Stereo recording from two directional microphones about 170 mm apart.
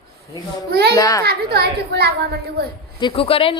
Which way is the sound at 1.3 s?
70° right (ahead or behind).